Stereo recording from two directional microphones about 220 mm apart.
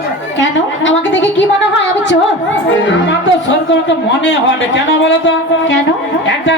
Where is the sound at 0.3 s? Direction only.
60° left (ahead or behind).